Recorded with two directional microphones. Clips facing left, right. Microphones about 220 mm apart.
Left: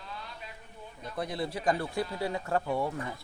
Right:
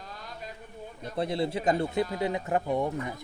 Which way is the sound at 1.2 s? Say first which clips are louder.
Right 5 dB; 25° right (ahead or behind).